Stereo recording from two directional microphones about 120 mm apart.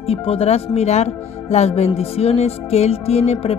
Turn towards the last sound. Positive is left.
turn(degrees=60)  # may be behind; listen again after turning